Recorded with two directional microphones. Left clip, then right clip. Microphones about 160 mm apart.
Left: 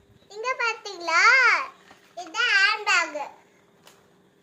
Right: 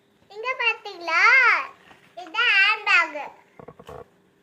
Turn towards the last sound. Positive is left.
turn(degrees=5)  # may be behind; listen again after turning